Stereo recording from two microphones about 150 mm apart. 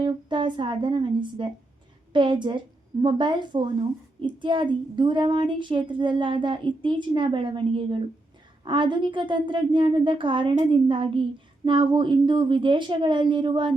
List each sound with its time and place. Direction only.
0.0 s speech: 30° right (ahead or behind)